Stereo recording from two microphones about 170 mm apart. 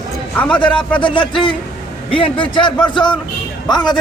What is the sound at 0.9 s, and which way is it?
A man's voice, 30° left (ahead or behind).